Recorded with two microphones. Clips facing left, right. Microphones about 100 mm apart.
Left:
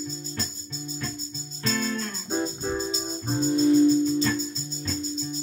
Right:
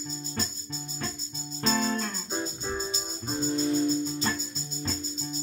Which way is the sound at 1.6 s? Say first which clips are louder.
Right 1 dB; 25° right (ahead or behind).